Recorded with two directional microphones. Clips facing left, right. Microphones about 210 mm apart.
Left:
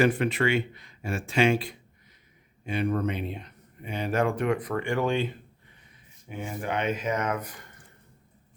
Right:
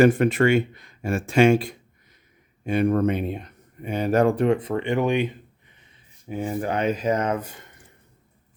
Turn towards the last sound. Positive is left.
turn(degrees=-25)  # may be behind; listen again after turning